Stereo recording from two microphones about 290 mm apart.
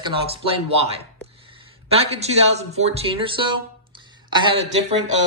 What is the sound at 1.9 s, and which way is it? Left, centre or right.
Speech, right.